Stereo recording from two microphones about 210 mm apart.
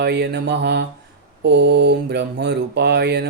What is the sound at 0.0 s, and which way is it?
Mantra, 55° right (ahead or behind).